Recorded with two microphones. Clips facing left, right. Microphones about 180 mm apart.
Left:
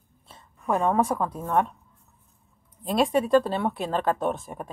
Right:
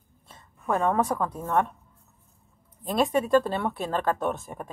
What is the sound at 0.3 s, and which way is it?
A woman's voice, 20° left (ahead or behind).